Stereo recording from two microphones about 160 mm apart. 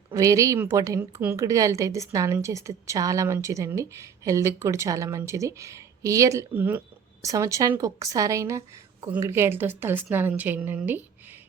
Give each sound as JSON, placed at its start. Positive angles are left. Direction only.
{"t": 0.1, "sound": "a woman's voice", "side_deg": -20}